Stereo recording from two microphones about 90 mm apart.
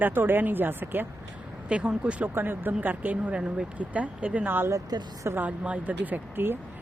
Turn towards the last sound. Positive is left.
turn(degrees=-25)  # may be behind; listen again after turning